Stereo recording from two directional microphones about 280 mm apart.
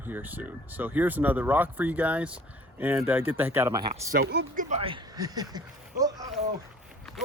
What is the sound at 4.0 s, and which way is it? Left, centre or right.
Speech, right.